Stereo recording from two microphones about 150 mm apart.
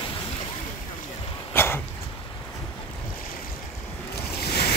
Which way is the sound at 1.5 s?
15° left (ahead or behind).